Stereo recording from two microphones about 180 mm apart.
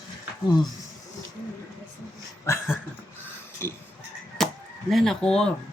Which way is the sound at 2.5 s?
15° left (ahead or behind).